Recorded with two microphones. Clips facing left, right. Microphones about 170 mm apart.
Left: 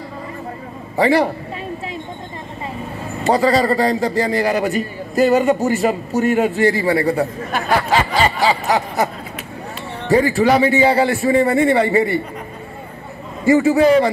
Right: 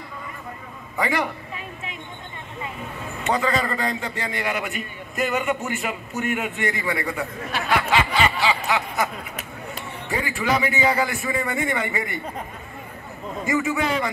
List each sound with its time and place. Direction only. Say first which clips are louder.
0.9 s a man's voice: left 9 dB; 35° left (ahead or behind)
3.3 s a man's voice: left 8 dB; 35° left (ahead or behind)
7.5 s a sound: left 4 dB; 40° left (ahead or behind)
10.0 s a man's voice: left 11 dB; 35° left (ahead or behind)
13.5 s a man's voice: left 11 dB; 35° left (ahead or behind)